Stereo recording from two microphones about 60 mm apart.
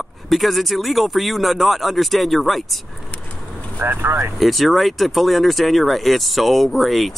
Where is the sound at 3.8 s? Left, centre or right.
Right.